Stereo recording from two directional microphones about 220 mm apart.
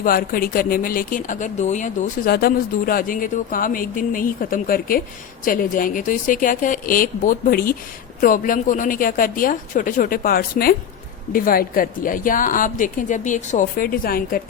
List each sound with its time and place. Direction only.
0.0 s a woman's voice: 40° left (ahead or behind)